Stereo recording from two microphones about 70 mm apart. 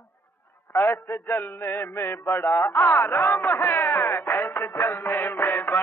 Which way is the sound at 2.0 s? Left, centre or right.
Left.